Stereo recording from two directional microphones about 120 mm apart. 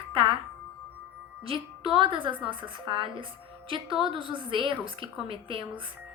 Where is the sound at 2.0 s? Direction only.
45° right (ahead or behind).